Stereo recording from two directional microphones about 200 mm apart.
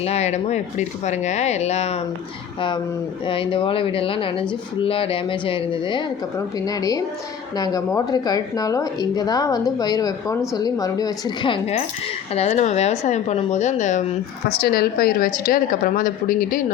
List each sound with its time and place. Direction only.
0.0 s speech: 30° left (ahead or behind)
14.6 s speech: 50° left (ahead or behind)